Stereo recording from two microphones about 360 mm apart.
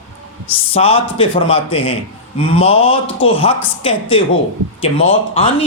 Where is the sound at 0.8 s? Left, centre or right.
Centre.